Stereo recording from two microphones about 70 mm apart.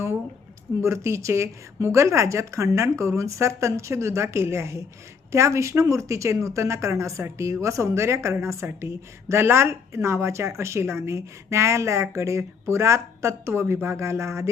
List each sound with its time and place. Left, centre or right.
0.8 s speech: right